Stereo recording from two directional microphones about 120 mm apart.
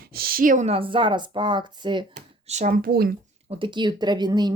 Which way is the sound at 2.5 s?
80° right.